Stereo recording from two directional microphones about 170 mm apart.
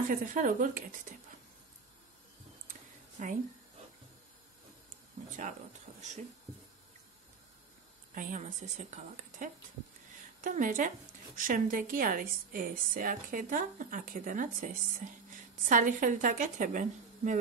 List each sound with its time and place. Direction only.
0.1 s a woman's voice: 50° right (ahead or behind)
3.2 s a woman's voice: 50° right (ahead or behind)
5.3 s speech: 45° right (ahead or behind)
8.1 s a woman's voice: 50° right (ahead or behind)